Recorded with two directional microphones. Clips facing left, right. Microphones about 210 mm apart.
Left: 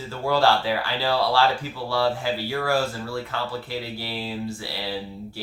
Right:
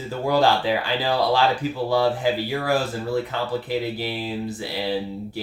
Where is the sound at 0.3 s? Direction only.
15° right (ahead or behind).